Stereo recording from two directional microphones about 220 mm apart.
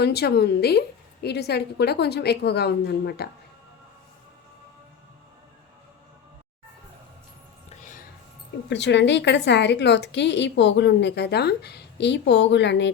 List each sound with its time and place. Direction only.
0.0 s a woman's voice: 45° left (ahead or behind)
8.7 s a woman's voice: 55° left (ahead or behind)